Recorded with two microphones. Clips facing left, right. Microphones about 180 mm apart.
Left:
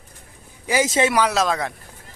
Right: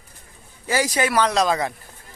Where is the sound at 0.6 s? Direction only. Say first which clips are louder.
Left 2 dB; 20° left (ahead or behind).